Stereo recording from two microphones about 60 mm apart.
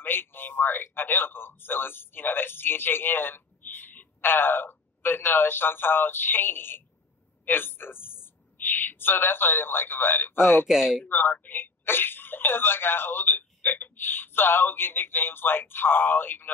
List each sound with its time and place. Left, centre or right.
0.0 s speech: left
10.7 s speech: centre
11.1 s speech: left